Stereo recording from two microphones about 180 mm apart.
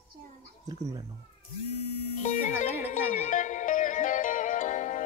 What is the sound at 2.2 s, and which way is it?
Music, 45° left (ahead or behind).